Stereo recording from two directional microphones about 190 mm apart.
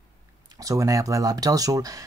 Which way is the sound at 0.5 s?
20° right (ahead or behind).